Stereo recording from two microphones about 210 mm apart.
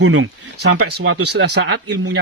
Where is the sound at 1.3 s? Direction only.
55° right (ahead or behind).